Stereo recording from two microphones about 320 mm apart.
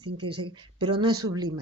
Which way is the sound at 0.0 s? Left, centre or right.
Centre.